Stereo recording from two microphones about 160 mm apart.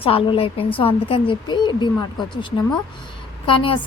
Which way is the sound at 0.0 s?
35° left (ahead or behind).